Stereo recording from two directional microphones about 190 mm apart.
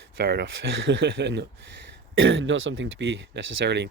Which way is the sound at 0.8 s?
80° right.